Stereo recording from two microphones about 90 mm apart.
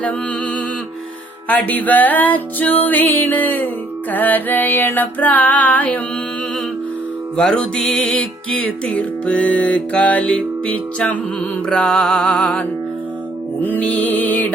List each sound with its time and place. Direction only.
1.5 s music: 15° left (ahead or behind)
7.3 s music: 10° left (ahead or behind)
13.6 s music: 20° left (ahead or behind)